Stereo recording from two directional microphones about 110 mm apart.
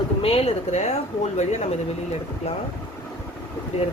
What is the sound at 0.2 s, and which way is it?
Speech, 60° left (ahead or behind).